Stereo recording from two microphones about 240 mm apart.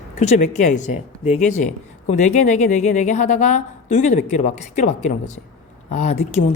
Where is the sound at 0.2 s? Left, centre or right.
Left.